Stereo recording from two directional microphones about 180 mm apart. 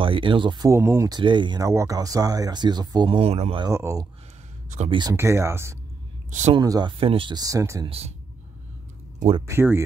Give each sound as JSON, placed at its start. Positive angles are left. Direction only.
{"t": 0.0, "sound": "speech", "side_deg": -30}
{"t": 3.6, "sound": "speech", "side_deg": -15}
{"t": 4.6, "sound": "speech", "side_deg": -40}
{"t": 5.1, "sound": "speech", "side_deg": -15}
{"t": 9.5, "sound": "speech", "side_deg": -15}